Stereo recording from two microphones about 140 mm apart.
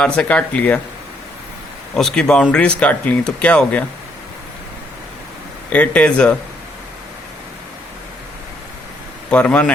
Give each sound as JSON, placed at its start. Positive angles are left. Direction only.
{"t": 0.0, "sound": "speech", "side_deg": 10}
{"t": 2.0, "sound": "speech", "side_deg": 5}
{"t": 5.7, "sound": "speech", "side_deg": 10}
{"t": 9.3, "sound": "speech", "side_deg": 10}